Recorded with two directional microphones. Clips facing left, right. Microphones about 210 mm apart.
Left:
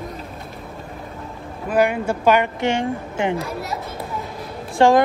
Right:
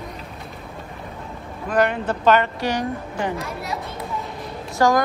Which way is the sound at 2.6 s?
25° left (ahead or behind).